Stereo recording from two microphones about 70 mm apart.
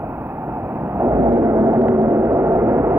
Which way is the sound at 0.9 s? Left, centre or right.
Right.